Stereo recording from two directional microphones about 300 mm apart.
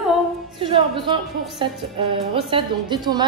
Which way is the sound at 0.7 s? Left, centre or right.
Centre.